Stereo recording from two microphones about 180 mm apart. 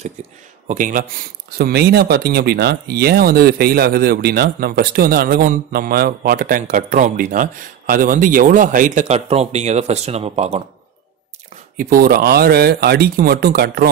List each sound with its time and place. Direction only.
0.7 s speech: 45° right (ahead or behind)
11.7 s speech: 50° right (ahead or behind)